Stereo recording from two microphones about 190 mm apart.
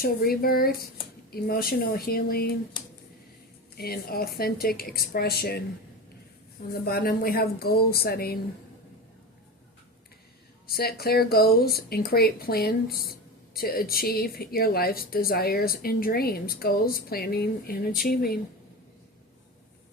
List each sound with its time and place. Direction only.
0.0 s speech: 50° left (ahead or behind)
3.8 s speech: 55° left (ahead or behind)
6.8 s speech: 50° left (ahead or behind)
10.7 s speech: 55° left (ahead or behind)